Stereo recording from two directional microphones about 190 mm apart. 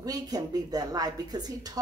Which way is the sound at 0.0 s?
20° right (ahead or behind).